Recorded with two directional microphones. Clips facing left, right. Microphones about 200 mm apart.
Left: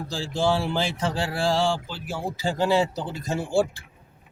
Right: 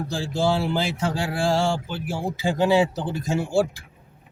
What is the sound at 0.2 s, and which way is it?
Speech, 10° right (ahead or behind).